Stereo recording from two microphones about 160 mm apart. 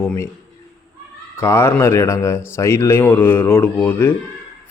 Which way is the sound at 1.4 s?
15° left (ahead or behind).